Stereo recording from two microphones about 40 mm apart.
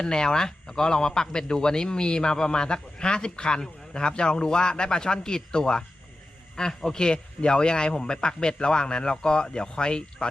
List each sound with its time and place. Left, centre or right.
0.0 s a man's voice: centre